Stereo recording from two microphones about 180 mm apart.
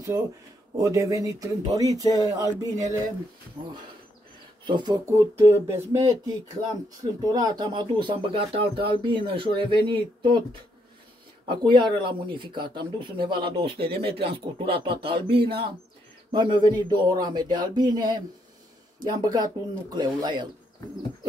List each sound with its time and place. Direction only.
0.7 s speech: 20° right (ahead or behind)
11.4 s speech: 25° right (ahead or behind)
13.9 s speech: 65° right (ahead or behind)
14.6 s speech: 30° right (ahead or behind)